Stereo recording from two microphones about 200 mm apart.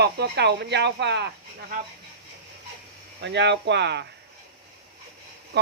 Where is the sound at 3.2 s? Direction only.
60° right (ahead or behind).